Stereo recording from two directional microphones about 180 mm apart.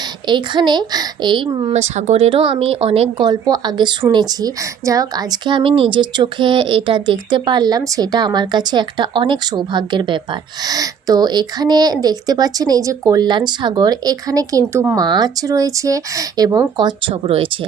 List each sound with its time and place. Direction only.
0.3 s speech: 25° right (ahead or behind)
1.7 s speech: 40° right (ahead or behind)